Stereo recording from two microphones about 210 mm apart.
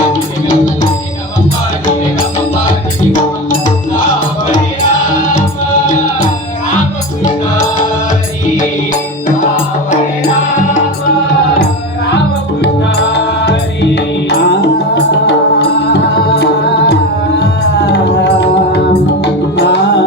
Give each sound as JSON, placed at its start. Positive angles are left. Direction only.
{"t": 12.6, "sound": "music", "side_deg": 50}